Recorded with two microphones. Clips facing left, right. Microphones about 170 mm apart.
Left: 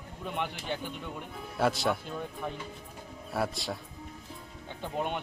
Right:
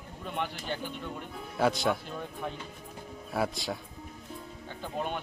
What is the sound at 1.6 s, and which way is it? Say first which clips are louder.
Speech: right 1 dB; centre (ahead or behind).